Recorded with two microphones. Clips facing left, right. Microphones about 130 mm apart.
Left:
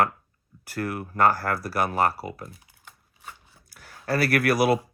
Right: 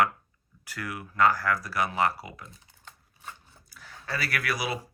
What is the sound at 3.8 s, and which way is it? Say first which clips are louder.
Speech: left 9 dB; 55° left (ahead or behind).